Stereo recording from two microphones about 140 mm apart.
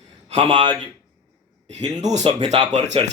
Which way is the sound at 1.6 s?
55° right (ahead or behind).